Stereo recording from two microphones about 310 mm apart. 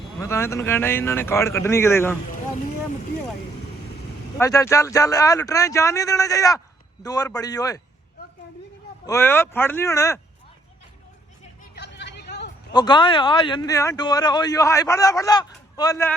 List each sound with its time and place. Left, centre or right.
0.2 s speech: centre
4.4 s speech: centre
9.0 s speech: centre
11.7 s hubbub: left
12.7 s speech: centre